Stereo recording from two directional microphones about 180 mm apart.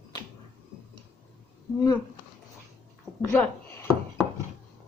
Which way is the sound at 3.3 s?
10° left (ahead or behind).